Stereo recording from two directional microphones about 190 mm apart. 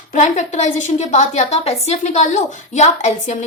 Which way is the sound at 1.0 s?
35° left (ahead or behind).